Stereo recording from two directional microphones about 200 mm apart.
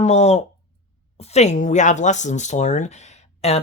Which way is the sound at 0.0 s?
35° left (ahead or behind).